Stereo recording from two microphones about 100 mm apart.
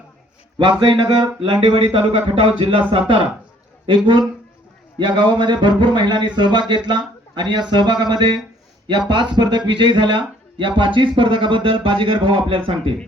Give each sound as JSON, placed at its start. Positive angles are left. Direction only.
{"t": 0.8, "sound": "speech", "side_deg": -55}
{"t": 1.4, "sound": "speech", "side_deg": -60}
{"t": 3.8, "sound": "speech", "side_deg": -55}